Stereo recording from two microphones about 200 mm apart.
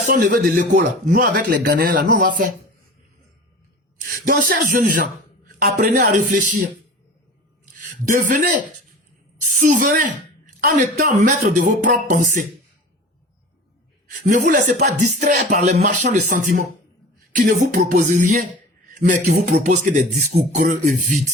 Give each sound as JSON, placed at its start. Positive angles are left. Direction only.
{"t": 0.1, "sound": "speech", "side_deg": -40}
{"t": 4.1, "sound": "speech", "side_deg": -45}
{"t": 7.8, "sound": "a woman's voice", "side_deg": -40}
{"t": 14.1, "sound": "speech", "side_deg": -40}
{"t": 17.3, "sound": "speech", "side_deg": -40}